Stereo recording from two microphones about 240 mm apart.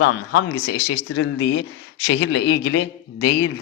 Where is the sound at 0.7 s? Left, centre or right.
Left.